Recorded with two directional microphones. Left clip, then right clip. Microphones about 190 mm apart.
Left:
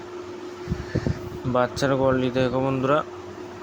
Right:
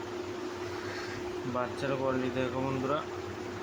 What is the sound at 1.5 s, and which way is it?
Speech, 40° left (ahead or behind).